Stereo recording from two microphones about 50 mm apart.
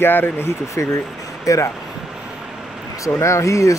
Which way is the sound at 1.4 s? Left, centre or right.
Left.